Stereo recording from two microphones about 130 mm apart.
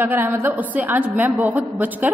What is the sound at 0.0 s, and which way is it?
A woman's voice, 15° right (ahead or behind).